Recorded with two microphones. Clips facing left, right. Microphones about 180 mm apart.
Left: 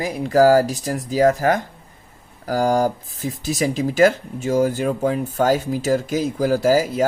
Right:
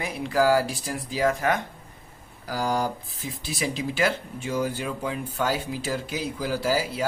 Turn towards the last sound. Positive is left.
turn(degrees=45)  # may be behind; listen again after turning